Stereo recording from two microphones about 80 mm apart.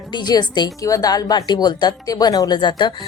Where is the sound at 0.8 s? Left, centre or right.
Left.